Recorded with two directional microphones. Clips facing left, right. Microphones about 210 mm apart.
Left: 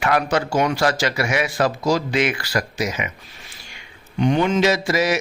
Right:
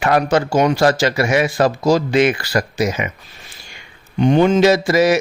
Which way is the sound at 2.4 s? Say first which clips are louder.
Right 5 dB; 30° right (ahead or behind).